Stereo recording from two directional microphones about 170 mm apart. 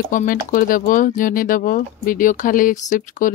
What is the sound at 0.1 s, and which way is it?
Speech, 50° left (ahead or behind).